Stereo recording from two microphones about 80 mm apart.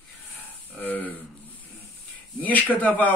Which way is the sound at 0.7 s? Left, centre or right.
Left.